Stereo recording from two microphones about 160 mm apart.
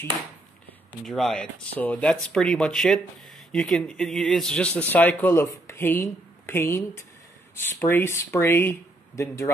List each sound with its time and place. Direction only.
1.0 s speech: centre (ahead or behind); by 9.5 s 20° left (ahead or behind)